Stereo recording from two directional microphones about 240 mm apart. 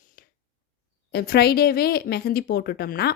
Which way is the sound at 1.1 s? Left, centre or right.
Left.